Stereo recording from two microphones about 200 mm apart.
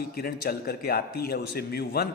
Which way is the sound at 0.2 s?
50° left (ahead or behind).